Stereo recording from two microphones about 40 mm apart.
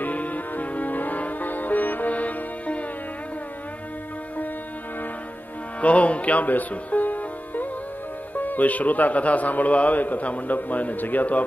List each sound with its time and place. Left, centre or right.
0.0 s music: left
5.8 s music: left
8.4 s a man's voice: left